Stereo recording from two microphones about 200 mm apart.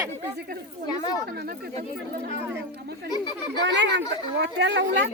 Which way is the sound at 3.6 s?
60° right (ahead or behind).